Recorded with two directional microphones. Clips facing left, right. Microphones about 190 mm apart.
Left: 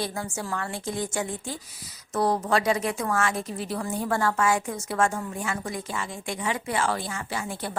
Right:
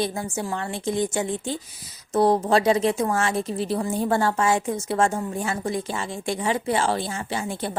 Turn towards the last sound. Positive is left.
turn(degrees=-25)  # may be behind; listen again after turning